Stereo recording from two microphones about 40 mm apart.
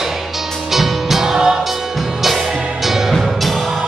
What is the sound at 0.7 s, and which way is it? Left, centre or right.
Music, centre.